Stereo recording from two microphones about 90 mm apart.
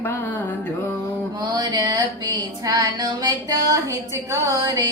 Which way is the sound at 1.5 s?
45° right (ahead or behind).